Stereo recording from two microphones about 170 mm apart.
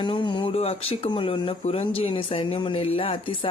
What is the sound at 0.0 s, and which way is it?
A woman's voice, 30° left (ahead or behind).